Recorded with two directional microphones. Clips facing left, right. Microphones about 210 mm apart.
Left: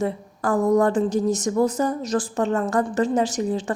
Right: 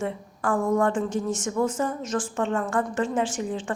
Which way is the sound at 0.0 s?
40° left (ahead or behind).